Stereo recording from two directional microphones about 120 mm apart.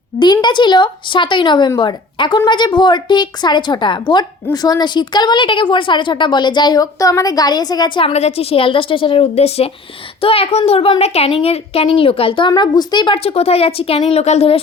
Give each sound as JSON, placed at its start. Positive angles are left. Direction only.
{"t": 0.2, "sound": "a woman's voice", "side_deg": 40}
{"t": 8.0, "sound": "a woman's voice", "side_deg": 60}
{"t": 12.5, "sound": "a woman's voice", "side_deg": 35}
{"t": 13.2, "sound": "speech", "side_deg": 55}